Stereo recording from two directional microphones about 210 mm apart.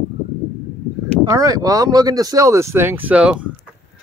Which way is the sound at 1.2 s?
15° right (ahead or behind).